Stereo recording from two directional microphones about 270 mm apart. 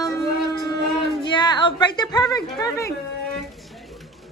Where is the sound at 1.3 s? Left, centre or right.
Centre.